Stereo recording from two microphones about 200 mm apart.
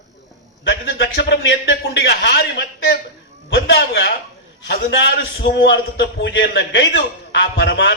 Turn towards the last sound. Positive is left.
turn(degrees=60)  # may be behind; listen again after turning